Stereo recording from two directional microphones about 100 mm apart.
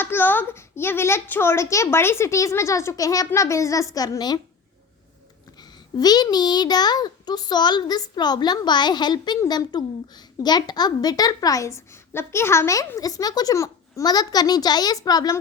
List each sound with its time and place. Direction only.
0.0 s a child's voice: 20° left (ahead or behind); by 4.4 s 40° left (ahead or behind)
6.0 s a child's voice: 40° left (ahead or behind)